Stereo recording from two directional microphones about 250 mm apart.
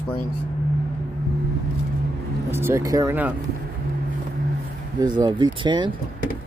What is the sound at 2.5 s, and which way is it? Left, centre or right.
Speech, centre.